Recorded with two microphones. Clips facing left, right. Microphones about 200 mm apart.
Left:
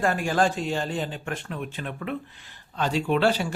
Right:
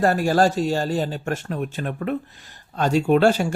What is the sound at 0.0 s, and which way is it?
A man's voice, 40° right (ahead or behind).